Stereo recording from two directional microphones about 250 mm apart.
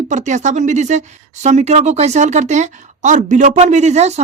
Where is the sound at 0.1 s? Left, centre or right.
Right.